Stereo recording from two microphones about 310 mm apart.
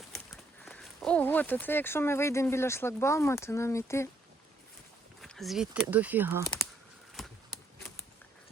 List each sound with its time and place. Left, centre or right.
0.6 s speech: centre
5.2 s speech: centre
7.2 s a sound: centre